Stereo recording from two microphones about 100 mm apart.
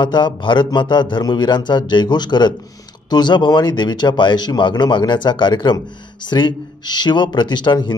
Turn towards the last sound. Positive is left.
turn(degrees=50)  # may be behind; listen again after turning